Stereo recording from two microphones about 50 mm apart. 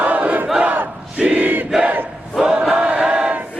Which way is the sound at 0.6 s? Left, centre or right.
Right.